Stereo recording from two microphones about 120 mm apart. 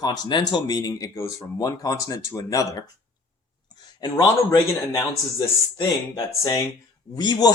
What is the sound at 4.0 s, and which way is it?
Speech, 35° left (ahead or behind).